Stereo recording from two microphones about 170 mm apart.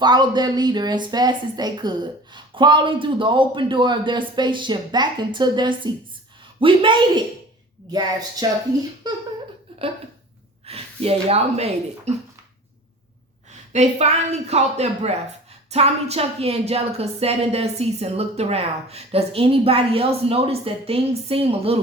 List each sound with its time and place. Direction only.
0.0 s a woman's voice: 25° right (ahead or behind)
10.7 s speech: 35° right (ahead or behind)
13.7 s speech: 40° right (ahead or behind)